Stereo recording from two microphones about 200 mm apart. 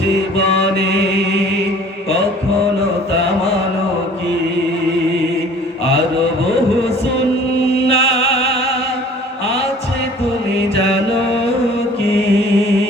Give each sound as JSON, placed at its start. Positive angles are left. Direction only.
{"t": 0.3, "sound": "mantra", "side_deg": 30}
{"t": 0.8, "sound": "mantra", "side_deg": -60}
{"t": 7.9, "sound": "music", "side_deg": 30}
{"t": 12.0, "sound": "mantra", "side_deg": 30}